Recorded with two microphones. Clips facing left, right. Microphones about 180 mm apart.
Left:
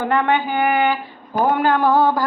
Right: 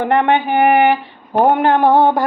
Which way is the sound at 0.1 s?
25° right (ahead or behind).